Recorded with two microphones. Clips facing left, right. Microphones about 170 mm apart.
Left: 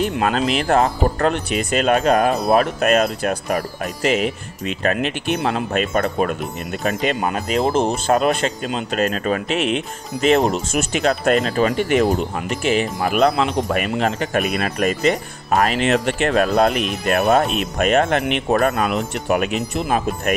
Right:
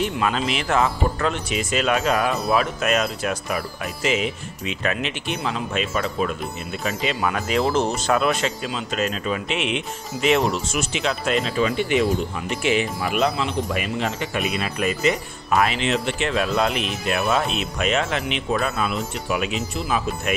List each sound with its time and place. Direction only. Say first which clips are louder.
0.0 s speech: left 4 dB; 45° left (ahead or behind)